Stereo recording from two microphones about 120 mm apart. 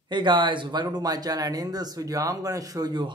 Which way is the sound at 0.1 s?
40° right (ahead or behind).